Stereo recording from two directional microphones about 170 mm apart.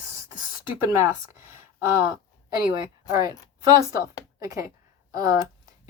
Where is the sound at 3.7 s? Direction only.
20° right (ahead or behind).